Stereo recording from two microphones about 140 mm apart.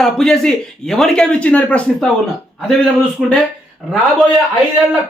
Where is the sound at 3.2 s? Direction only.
5° right (ahead or behind).